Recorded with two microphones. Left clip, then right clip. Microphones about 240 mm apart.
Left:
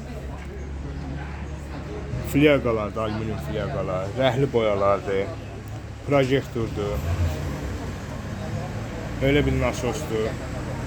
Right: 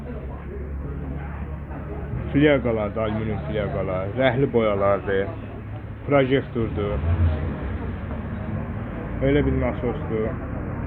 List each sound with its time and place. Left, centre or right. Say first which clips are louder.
2.3 s speech: even; centre
9.2 s speech: even; left